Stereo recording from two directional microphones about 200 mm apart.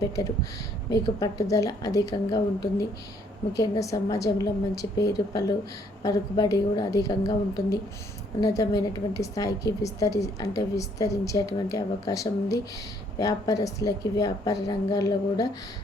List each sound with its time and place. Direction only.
0.0 s a woman's voice: 15° left (ahead or behind)